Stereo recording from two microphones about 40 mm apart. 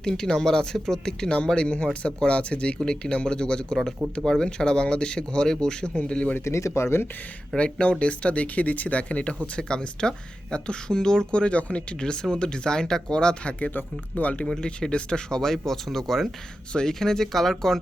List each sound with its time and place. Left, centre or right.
0.0 s speech: centre
6.3 s speech: left
7.5 s speech: left
9.6 s speech: left
14.4 s speech: centre
15.4 s speech: centre